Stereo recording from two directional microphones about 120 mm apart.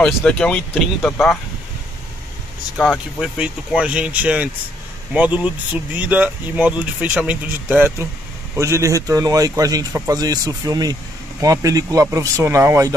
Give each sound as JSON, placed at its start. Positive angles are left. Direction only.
{"t": 0.0, "sound": "speech", "side_deg": 10}
{"t": 3.2, "sound": "speech", "side_deg": -10}